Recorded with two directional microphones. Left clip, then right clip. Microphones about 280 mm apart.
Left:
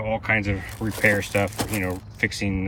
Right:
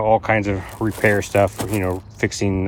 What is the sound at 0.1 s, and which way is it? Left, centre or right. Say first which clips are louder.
Speech: right 4 dB; centre.